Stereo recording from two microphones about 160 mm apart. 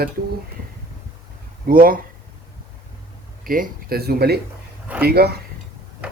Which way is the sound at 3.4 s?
60° right (ahead or behind).